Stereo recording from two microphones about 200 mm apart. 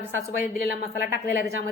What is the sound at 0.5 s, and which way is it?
Speech, 50° left (ahead or behind).